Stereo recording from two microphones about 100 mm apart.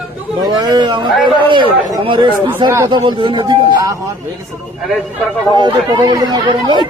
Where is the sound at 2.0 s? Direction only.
55° right (ahead or behind).